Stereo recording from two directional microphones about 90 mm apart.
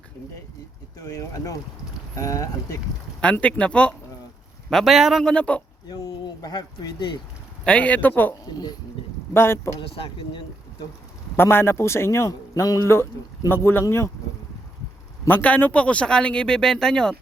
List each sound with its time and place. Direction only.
0.9 s speech: 40° left (ahead or behind)
3.3 s speech: 15° left (ahead or behind)
4.7 s a man's voice: centre (ahead or behind)
5.2 s speech: 15° left (ahead or behind)
5.9 s speech: 50° left (ahead or behind)
7.6 s speech: 15° left (ahead or behind)
9.3 s a man's voice: 25° left (ahead or behind)
11.3 s a man's voice: 25° left (ahead or behind)
12.3 s a man's voice: 40° left (ahead or behind); by 13.8 s 25° left (ahead or behind)
15.3 s speech: 20° left (ahead or behind)